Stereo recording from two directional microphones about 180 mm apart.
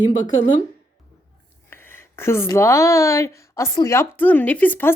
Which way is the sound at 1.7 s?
10° left (ahead or behind).